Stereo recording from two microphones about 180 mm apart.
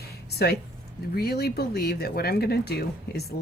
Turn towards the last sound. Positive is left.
turn(degrees=60)  # may be behind; listen again after turning